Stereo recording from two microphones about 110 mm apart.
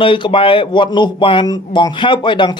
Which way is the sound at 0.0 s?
50° left (ahead or behind).